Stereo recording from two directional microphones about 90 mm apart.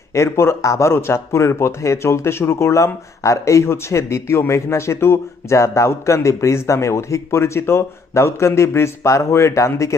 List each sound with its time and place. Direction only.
0.1 s speech: 30° left (ahead or behind)